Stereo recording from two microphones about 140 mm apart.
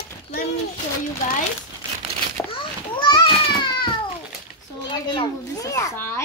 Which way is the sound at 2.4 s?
35° left (ahead or behind).